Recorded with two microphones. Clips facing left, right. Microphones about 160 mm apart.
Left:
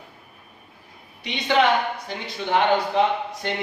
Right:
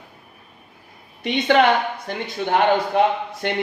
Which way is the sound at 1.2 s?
55° right (ahead or behind).